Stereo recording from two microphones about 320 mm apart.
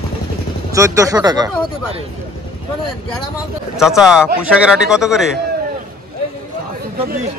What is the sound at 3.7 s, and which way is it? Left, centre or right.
Speech, centre.